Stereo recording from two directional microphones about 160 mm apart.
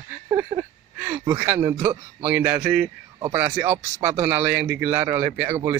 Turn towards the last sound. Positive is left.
turn(degrees=-15)  # may be behind; listen again after turning